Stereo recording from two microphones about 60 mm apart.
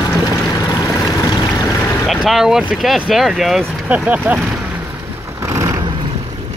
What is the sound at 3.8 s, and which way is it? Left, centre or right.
Speech, centre.